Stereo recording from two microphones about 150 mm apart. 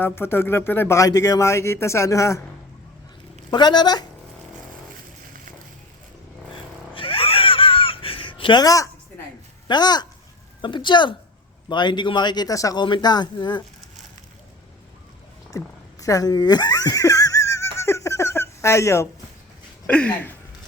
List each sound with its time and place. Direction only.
0.0 s speech: 15° left (ahead or behind)
3.5 s speech: 30° left (ahead or behind)
6.9 s a sound: 35° left (ahead or behind)
9.6 s speech: 30° left (ahead or behind)
15.5 s giggle: 20° left (ahead or behind)
19.9 s speech: 10° left (ahead or behind)